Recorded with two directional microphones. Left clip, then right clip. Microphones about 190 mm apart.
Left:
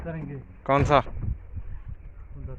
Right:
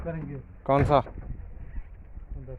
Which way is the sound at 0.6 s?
10° right (ahead or behind).